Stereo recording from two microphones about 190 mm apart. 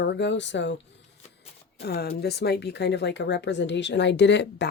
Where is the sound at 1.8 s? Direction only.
60° left (ahead or behind).